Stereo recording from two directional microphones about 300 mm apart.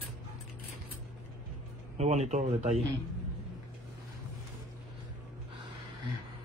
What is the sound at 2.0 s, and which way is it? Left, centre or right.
Speech, right.